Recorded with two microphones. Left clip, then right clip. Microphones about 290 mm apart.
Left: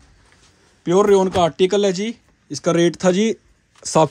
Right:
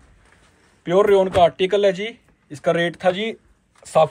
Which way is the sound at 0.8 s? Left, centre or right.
Left.